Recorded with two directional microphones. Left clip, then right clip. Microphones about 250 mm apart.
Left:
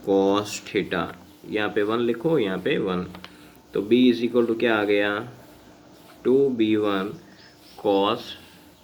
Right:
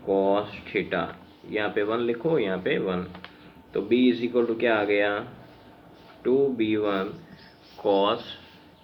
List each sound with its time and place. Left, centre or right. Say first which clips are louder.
0.1 s speech: left 2 dB; left
6.2 s speech: left 3 dB; left